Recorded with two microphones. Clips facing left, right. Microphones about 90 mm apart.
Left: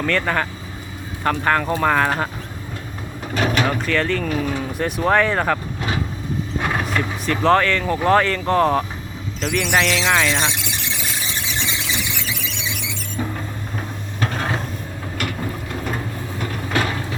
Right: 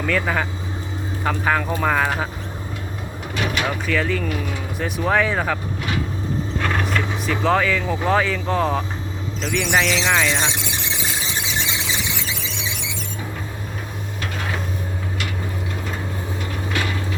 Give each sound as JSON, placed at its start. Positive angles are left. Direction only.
{"t": 0.0, "sound": "speech", "side_deg": -5}
{"t": 3.3, "sound": "vehicle", "side_deg": 40}
{"t": 3.7, "sound": "speech", "side_deg": -5}
{"t": 6.6, "sound": "vehicle", "side_deg": 10}
{"t": 6.8, "sound": "speech", "side_deg": 0}
{"t": 11.2, "sound": "squeal", "side_deg": -20}
{"t": 14.2, "sound": "a sound", "side_deg": 40}